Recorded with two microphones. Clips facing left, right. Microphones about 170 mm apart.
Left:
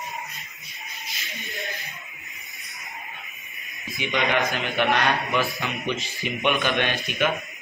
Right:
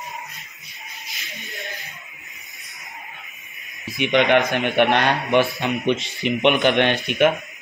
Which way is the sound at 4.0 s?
65° right (ahead or behind).